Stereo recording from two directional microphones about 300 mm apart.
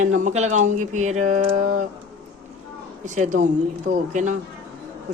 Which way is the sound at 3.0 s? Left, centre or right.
Right.